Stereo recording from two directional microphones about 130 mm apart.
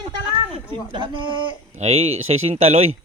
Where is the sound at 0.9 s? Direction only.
40° right (ahead or behind).